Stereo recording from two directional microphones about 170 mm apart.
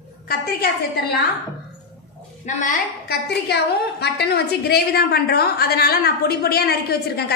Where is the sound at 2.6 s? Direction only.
50° left (ahead or behind).